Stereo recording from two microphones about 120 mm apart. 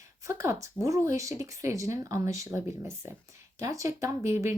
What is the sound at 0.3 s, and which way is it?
Speech, 25° right (ahead or behind).